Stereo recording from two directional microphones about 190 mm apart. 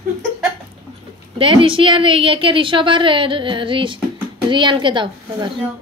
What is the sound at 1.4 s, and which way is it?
A woman's voice, 25° right (ahead or behind).